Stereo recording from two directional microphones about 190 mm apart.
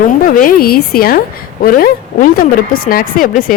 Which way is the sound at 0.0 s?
45° left (ahead or behind).